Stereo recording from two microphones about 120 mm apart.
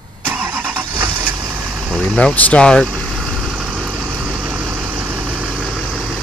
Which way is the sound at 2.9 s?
Centre (ahead or behind).